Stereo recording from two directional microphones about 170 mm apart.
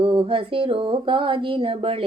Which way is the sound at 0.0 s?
30° right (ahead or behind).